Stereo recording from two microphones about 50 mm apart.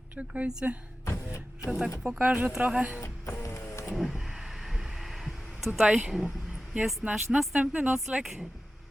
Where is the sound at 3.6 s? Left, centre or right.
Left.